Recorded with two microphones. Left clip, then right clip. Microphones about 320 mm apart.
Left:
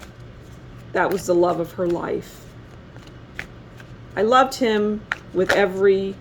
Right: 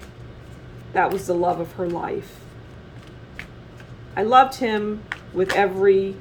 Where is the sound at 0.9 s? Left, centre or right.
Left.